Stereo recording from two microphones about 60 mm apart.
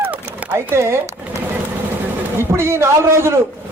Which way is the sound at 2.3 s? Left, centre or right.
Right.